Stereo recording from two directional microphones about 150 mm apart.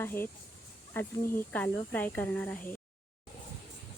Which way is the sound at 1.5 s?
10° left (ahead or behind).